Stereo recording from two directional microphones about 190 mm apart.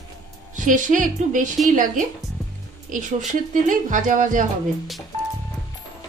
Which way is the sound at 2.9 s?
45° right (ahead or behind).